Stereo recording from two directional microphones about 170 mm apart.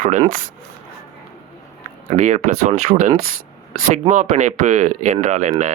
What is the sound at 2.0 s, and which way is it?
Speech, 45° right (ahead or behind).